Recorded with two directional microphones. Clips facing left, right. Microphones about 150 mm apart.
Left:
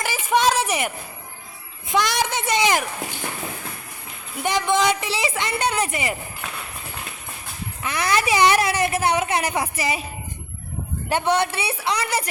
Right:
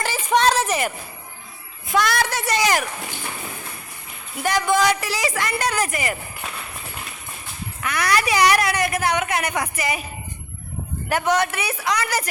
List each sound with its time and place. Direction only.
0.0 s a sound: 10° left (ahead or behind)
1.9 s a woman's voice: 20° left (ahead or behind)
4.4 s a woman's voice: 20° left (ahead or behind)
7.8 s a woman's voice: 25° left (ahead or behind)
11.1 s a woman's voice: 30° left (ahead or behind)